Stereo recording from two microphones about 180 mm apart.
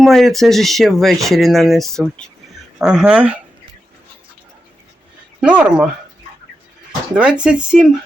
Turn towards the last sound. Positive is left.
turn(degrees=-5)  # may be behind; listen again after turning